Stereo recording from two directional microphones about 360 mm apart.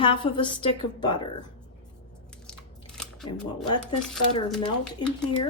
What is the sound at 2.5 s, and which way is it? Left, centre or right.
Biting, centre.